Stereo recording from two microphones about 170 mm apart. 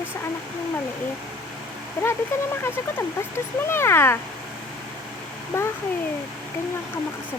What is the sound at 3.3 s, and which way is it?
Speech, 15° left (ahead or behind).